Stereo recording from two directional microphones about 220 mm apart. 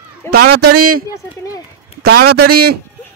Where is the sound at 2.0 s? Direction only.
45° right (ahead or behind).